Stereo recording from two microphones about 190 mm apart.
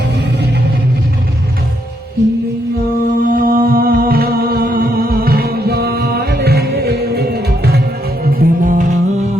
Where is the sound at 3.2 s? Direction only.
50° right (ahead or behind).